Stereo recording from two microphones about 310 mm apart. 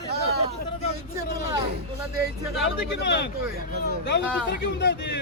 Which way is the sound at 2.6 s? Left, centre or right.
Left.